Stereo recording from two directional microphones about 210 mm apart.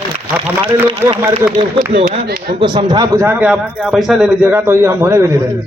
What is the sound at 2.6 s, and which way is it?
A man's voice, 20° right (ahead or behind).